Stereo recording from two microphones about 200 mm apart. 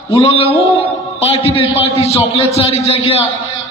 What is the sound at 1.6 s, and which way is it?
A man's voice, 30° left (ahead or behind).